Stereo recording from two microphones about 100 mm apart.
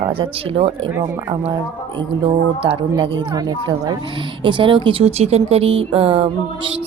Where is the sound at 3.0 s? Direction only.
45° right (ahead or behind).